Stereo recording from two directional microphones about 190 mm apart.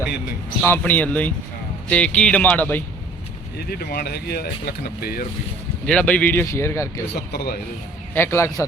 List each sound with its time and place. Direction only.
0.6 s speech: 10° left (ahead or behind)
3.6 s speech: 55° left (ahead or behind)
5.8 s speech: 5° left (ahead or behind)
7.1 s speech: 60° left (ahead or behind)
8.1 s speech: 15° left (ahead or behind)